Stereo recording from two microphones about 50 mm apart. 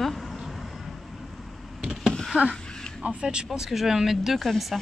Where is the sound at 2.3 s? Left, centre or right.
Right.